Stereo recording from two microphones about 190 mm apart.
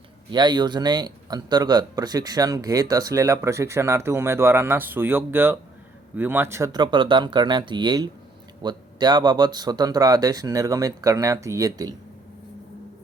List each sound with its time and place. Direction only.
0.3 s speech: 25° right (ahead or behind)